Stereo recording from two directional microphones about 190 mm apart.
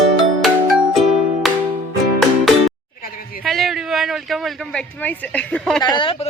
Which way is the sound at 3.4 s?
Centre (ahead or behind).